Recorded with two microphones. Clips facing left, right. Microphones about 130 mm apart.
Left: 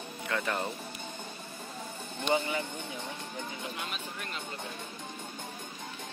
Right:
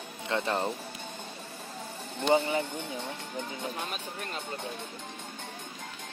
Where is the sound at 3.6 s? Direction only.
35° right (ahead or behind).